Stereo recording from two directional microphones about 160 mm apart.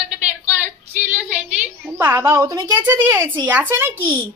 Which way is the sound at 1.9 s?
15° right (ahead or behind).